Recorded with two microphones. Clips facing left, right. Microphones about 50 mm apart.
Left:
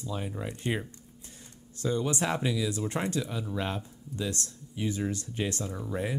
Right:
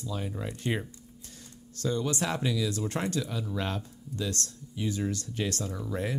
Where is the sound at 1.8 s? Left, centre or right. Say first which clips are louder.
Left 1 dB; left.